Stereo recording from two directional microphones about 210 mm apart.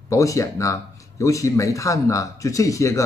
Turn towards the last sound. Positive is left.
turn(degrees=15)  # may be behind; listen again after turning